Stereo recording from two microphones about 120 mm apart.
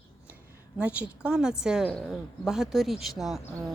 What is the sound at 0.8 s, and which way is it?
A woman's voice, 10° right (ahead or behind).